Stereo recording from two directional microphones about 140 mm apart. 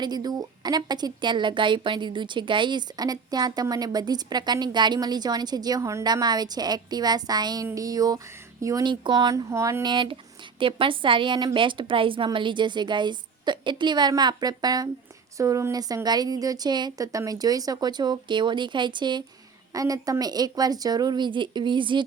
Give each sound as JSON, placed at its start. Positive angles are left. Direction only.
{"t": 0.0, "sound": "a woman's voice", "side_deg": -30}
{"t": 9.5, "sound": "a woman's voice", "side_deg": -20}
{"t": 9.8, "sound": "a woman's voice", "side_deg": -35}